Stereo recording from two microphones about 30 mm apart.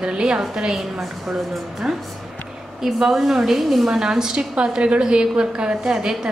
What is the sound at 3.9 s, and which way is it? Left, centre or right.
A woman's voice, centre.